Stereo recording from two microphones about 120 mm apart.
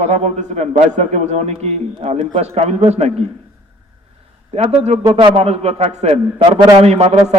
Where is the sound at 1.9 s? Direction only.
50° right (ahead or behind).